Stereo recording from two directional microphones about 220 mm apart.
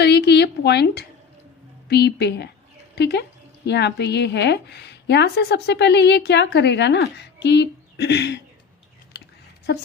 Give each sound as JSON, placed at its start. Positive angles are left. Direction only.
{"t": 0.0, "sound": "a woman's voice", "side_deg": 50}